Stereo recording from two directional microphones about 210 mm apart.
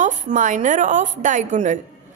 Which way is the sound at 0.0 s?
35° right (ahead or behind).